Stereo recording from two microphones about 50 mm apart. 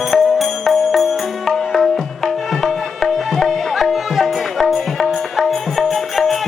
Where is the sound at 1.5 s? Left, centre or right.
Centre.